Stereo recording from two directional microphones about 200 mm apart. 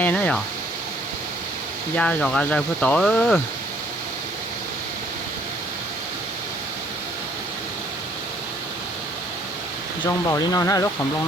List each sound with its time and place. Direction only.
0.0 s speech: 5° left (ahead or behind)
2.0 s speech: 5° left (ahead or behind)
10.0 s speech: 15° left (ahead or behind)